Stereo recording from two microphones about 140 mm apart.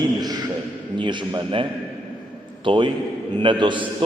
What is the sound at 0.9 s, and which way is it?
Speech, 35° right (ahead or behind).